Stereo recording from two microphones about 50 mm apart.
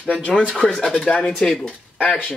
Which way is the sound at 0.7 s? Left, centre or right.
Centre.